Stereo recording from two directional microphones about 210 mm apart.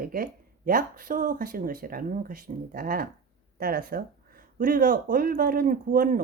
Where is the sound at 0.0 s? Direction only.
45° right (ahead or behind).